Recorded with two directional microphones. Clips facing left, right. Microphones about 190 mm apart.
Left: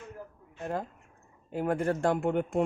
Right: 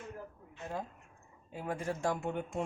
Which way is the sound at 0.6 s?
60° left (ahead or behind).